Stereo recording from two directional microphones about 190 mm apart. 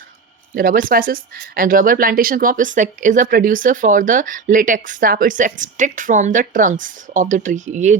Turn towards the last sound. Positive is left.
turn(degrees=-40)  # may be behind; listen again after turning